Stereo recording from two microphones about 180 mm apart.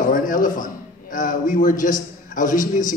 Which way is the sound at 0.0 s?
45° left (ahead or behind).